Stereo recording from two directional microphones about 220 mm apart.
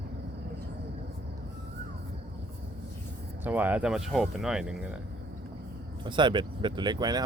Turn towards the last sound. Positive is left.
turn(degrees=-20)  # may be behind; listen again after turning